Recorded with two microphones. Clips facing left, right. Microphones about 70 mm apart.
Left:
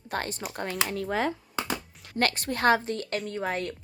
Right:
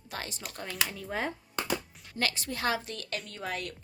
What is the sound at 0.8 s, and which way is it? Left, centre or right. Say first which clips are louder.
Speech: left 6 dB; left.